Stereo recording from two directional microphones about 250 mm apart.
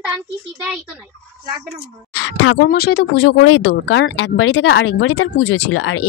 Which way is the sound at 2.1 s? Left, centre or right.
Left.